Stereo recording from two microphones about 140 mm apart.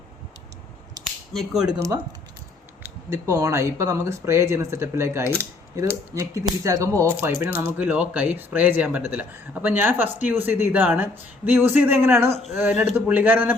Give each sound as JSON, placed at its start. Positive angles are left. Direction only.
{"t": 1.3, "sound": "speech", "side_deg": 0}
{"t": 1.7, "sound": "speech", "side_deg": -20}